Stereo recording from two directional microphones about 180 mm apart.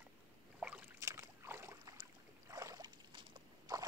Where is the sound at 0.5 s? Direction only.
5° right (ahead or behind).